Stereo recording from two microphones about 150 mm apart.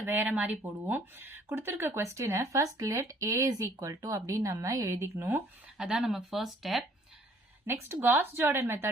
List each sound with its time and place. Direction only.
0.0 s speech: 10° right (ahead or behind)
7.7 s speech: 15° right (ahead or behind)